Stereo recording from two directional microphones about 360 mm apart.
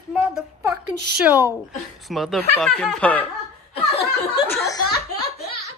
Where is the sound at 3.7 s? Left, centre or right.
Centre.